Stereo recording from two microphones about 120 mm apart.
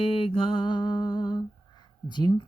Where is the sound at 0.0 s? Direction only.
50° left (ahead or behind).